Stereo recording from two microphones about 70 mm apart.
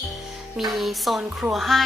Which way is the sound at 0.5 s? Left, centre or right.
Centre.